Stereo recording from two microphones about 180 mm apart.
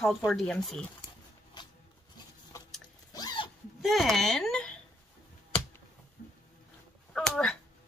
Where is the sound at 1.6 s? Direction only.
25° left (ahead or behind).